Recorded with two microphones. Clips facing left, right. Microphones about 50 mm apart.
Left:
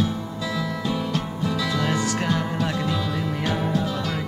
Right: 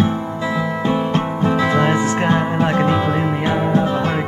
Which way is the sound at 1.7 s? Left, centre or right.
Right.